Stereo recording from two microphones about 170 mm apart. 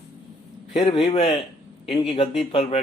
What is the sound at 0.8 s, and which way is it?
A man's voice, 30° left (ahead or behind).